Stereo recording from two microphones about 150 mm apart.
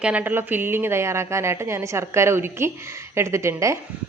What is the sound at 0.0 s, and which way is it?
A woman's voice, 10° right (ahead or behind).